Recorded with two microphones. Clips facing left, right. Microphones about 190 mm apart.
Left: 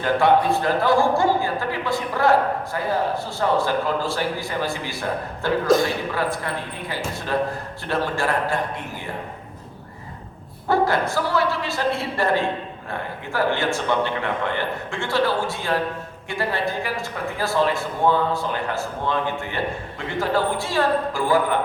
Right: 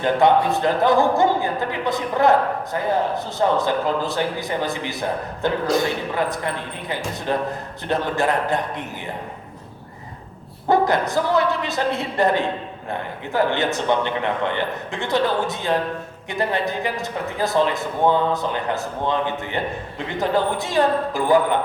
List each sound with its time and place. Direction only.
0.0 s a man's voice: 20° right (ahead or behind)
10.7 s a man's voice: 20° right (ahead or behind)